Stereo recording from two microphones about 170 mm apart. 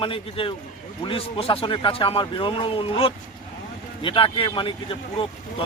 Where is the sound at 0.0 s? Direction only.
30° left (ahead or behind).